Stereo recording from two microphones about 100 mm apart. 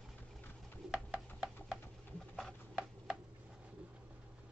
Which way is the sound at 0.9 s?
10° right (ahead or behind).